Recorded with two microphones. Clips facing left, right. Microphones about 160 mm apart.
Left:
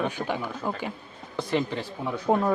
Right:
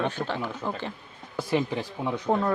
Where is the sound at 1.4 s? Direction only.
10° right (ahead or behind).